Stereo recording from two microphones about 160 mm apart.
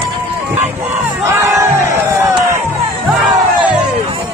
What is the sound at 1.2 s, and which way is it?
Crowd, 20° right (ahead or behind).